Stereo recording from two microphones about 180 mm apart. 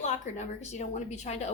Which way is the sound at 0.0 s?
40° left (ahead or behind).